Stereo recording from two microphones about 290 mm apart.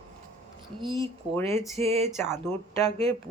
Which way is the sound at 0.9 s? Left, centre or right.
Centre.